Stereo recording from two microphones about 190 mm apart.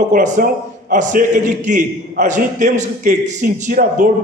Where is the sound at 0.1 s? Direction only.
40° right (ahead or behind).